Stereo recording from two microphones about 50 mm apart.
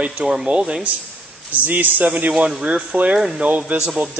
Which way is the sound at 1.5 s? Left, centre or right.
Right.